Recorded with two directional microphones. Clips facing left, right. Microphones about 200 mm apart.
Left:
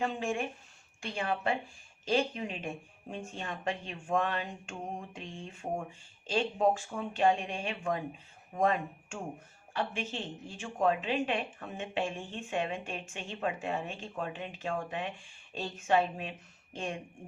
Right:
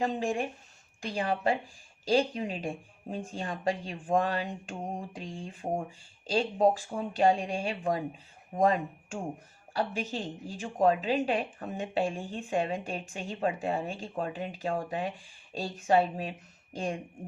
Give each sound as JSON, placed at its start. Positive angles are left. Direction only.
{"t": 0.0, "sound": "speech", "side_deg": -35}